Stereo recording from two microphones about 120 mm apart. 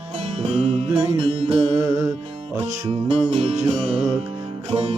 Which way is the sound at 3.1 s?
60° right (ahead or behind).